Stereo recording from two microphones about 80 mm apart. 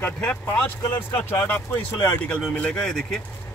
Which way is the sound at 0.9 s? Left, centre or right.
Left.